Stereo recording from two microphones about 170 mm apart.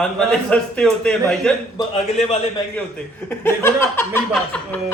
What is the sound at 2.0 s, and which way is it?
Speech, 40° left (ahead or behind).